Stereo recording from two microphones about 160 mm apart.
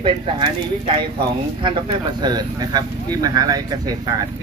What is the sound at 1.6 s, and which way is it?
Speech, 30° right (ahead or behind).